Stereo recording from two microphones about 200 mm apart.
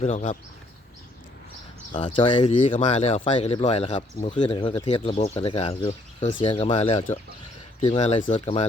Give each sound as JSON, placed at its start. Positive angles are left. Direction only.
{"t": 0.0, "sound": "speech", "side_deg": 35}
{"t": 2.0, "sound": "speech", "side_deg": 25}